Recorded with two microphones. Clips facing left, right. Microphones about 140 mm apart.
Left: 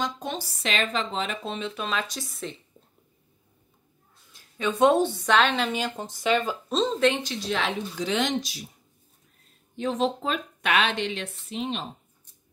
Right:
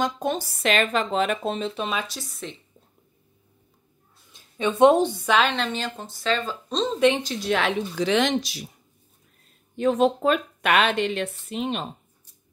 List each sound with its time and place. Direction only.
0.0 s speech: 50° right (ahead or behind)
1.8 s speech: 15° right (ahead or behind)
2.0 s a woman's voice: centre (ahead or behind)
4.3 s a woman's voice: 25° right (ahead or behind); by 6.5 s 15° left (ahead or behind)
6.7 s speech: centre (ahead or behind)
7.4 s speech: 60° right (ahead or behind)
9.8 s speech: 55° right (ahead or behind)